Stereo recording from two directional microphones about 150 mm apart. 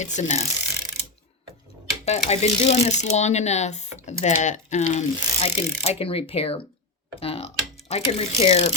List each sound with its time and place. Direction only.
0.0 s speech: 45° left (ahead or behind)
2.0 s speech: 45° left (ahead or behind)